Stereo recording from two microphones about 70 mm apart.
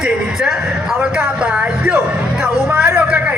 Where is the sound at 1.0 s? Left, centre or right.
Centre.